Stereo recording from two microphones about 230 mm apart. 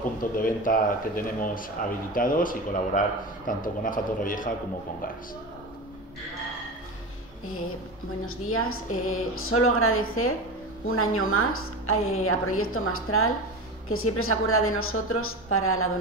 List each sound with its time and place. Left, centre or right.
0.2 s speech: left
8.5 s a woman's voice: left